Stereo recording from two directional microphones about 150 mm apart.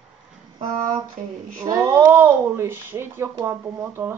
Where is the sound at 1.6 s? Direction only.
20° right (ahead or behind).